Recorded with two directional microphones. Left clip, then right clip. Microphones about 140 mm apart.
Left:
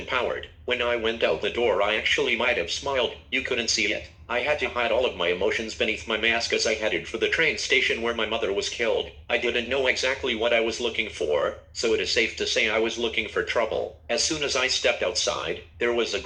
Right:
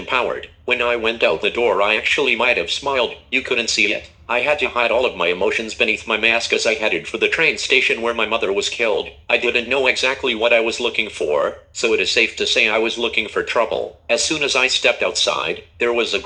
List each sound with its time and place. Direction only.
0.1 s speech: 30° right (ahead or behind)